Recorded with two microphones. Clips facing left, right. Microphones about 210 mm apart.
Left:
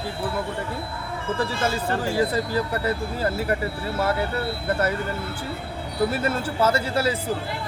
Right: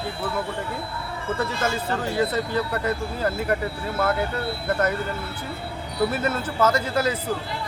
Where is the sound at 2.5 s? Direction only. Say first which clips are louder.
Even; 10° left (ahead or behind).